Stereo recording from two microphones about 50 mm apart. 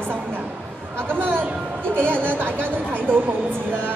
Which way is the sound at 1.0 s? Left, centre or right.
Right.